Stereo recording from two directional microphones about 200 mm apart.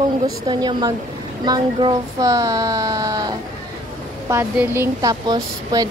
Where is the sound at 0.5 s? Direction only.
20° right (ahead or behind).